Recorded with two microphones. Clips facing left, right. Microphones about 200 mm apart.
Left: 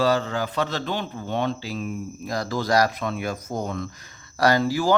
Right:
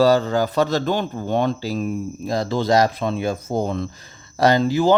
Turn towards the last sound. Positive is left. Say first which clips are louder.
# right 4 dB
turn(degrees=-20)  # may be behind; listen again after turning